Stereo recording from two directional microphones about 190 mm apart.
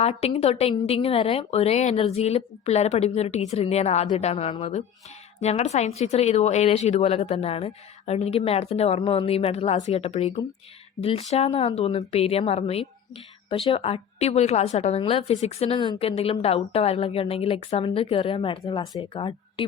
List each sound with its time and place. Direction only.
0.0 s a woman's voice: 30° left (ahead or behind)